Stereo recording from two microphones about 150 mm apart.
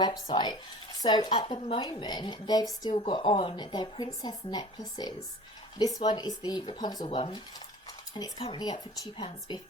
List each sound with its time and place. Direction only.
0.0 s speech: 30° left (ahead or behind)